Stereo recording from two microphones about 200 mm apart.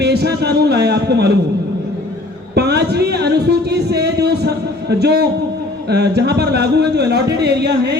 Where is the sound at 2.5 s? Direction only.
55° right (ahead or behind).